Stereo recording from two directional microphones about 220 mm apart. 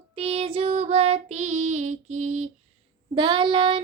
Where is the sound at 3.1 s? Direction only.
20° right (ahead or behind).